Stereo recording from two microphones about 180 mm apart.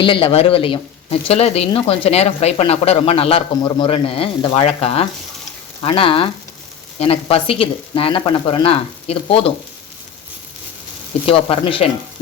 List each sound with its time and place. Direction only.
0.0 s speech: 30° left (ahead or behind)
11.3 s speech: 30° left (ahead or behind)